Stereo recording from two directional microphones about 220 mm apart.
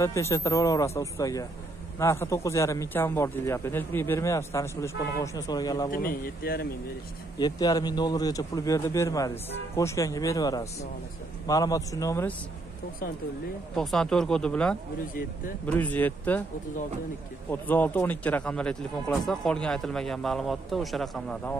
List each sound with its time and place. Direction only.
0.0 s a man's voice: 15° left (ahead or behind)
5.9 s speech: 40° left (ahead or behind)
7.3 s a man's voice: 15° left (ahead or behind)
13.7 s a man's voice: 5° left (ahead or behind)
17.5 s speech: 10° left (ahead or behind)